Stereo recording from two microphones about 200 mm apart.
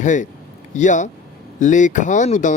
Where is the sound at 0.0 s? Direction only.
40° left (ahead or behind).